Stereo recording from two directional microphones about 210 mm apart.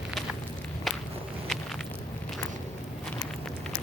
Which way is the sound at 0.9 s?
Centre (ahead or behind).